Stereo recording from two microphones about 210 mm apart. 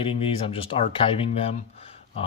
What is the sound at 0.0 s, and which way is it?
Speech, 25° left (ahead or behind).